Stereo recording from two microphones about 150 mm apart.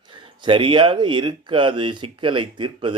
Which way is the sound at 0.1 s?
35° right (ahead or behind).